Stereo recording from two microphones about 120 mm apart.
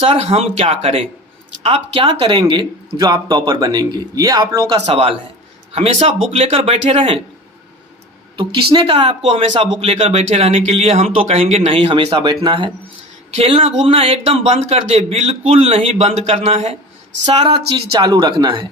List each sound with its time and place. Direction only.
0.0 s a woman's voice: 60° right (ahead or behind)
2.2 s speech: 40° right (ahead or behind)
5.7 s speech: 60° right (ahead or behind)
8.4 s a woman's voice: 40° right (ahead or behind)
13.3 s a woman's voice: 55° right (ahead or behind)
18.0 s speech: 35° right (ahead or behind)